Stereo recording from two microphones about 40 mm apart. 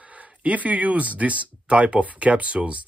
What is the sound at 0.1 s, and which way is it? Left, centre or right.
Speech, right.